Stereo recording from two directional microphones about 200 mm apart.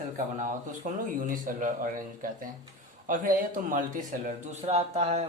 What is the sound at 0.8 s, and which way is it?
Speech, 40° right (ahead or behind).